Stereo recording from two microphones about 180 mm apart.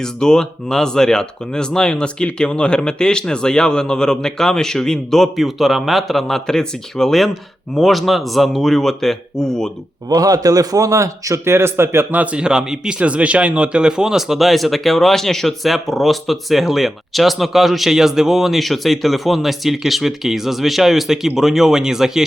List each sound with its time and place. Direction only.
0.0 s a man's voice: 5° left (ahead or behind)
10.1 s a man's voice: 20° right (ahead or behind); by 22.2 s 5° right (ahead or behind)